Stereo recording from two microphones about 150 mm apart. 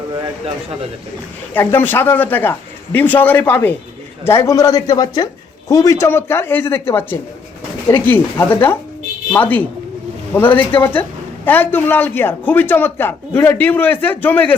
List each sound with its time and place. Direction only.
1.5 s speech: 10° left (ahead or behind)